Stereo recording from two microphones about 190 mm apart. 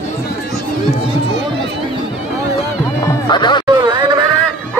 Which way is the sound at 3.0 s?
20° left (ahead or behind).